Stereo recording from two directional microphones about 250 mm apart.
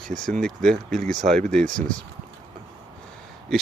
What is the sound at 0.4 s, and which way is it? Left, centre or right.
Speech, centre.